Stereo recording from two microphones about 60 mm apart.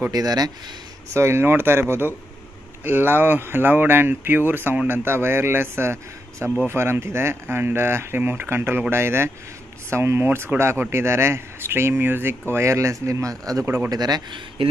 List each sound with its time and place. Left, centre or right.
0.1 s speech: right
1.1 s speech: right
13.8 s speech: right